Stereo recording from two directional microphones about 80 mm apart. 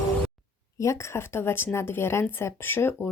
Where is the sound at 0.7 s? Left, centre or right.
Left.